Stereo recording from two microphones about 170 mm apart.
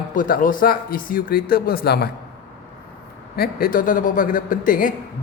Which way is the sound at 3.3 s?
55° left (ahead or behind).